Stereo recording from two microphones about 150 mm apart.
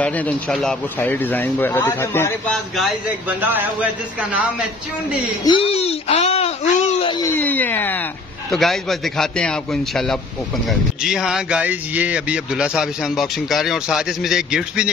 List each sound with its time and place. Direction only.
0.0 s speech: 10° left (ahead or behind)
2.4 s speech: centre (ahead or behind)
3.3 s speech: 10° right (ahead or behind)
5.4 s a sound: 35° left (ahead or behind)
7.2 s speech: 10° left (ahead or behind)
8.5 s speech: centre (ahead or behind)